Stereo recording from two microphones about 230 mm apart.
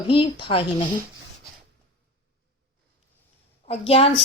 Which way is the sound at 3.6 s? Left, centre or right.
Left.